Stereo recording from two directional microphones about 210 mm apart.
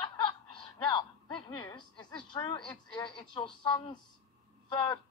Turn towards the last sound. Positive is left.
turn(degrees=20)  # may be behind; listen again after turning